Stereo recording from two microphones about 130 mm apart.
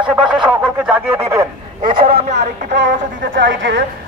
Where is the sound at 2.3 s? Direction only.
70° right (ahead or behind).